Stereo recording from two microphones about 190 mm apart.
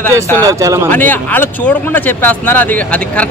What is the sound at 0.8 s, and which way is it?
Speech, 10° left (ahead or behind).